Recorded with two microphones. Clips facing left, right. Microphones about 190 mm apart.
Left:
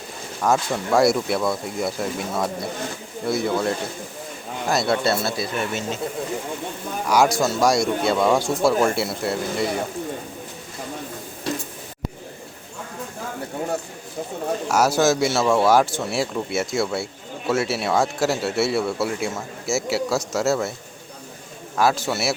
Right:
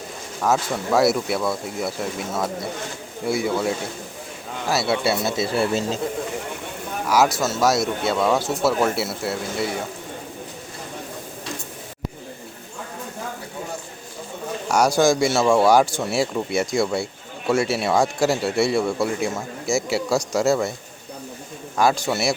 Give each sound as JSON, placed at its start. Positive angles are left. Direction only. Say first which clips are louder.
{"t": 0.4, "sound": "speech", "louder": "even", "side_deg": -5}
{"t": 5.5, "sound": "speech", "louder": "right 4 dB", "side_deg": -35}
{"t": 7.1, "sound": "speech", "louder": "left 1 dB", "side_deg": -5}
{"t": 14.7, "sound": "speech", "louder": "right 2 dB", "side_deg": 5}
{"t": 21.8, "sound": "speech", "louder": "right 1 dB", "side_deg": 5}